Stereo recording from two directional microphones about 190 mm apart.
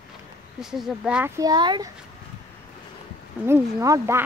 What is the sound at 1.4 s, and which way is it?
Speech, 20° right (ahead or behind).